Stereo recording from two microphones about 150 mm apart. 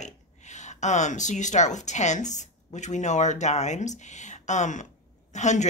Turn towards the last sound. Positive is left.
turn(degrees=50)  # may be behind; listen again after turning